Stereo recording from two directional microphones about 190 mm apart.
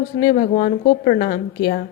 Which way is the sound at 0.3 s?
40° left (ahead or behind).